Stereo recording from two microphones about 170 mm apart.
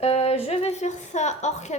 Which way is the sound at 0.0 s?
35° left (ahead or behind).